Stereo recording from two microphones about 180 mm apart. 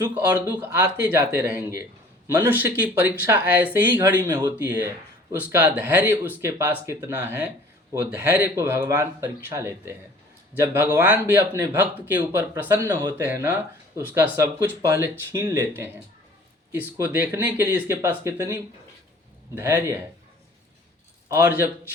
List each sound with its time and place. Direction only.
0.4 s speech: 10° right (ahead or behind)
3.9 s speech: 20° right (ahead or behind)
19.5 s speech: 15° right (ahead or behind)
21.3 s speech: 10° right (ahead or behind)